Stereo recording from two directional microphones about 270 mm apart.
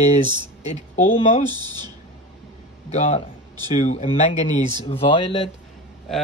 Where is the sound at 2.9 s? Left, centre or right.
Left.